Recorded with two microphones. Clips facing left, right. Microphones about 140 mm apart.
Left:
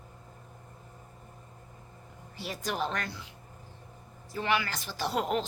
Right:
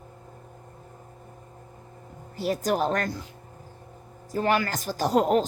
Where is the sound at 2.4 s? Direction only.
45° right (ahead or behind).